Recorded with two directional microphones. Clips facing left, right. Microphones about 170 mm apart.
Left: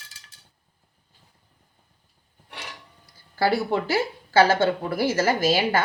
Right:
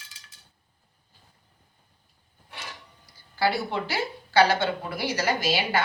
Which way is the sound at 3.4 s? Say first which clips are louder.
Left 4 dB; 45° left (ahead or behind).